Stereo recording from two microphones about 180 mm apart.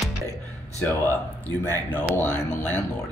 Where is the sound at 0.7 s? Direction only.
10° left (ahead or behind).